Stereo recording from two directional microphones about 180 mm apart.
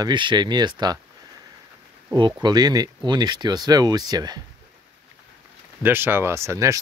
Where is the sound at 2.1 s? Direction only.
25° right (ahead or behind).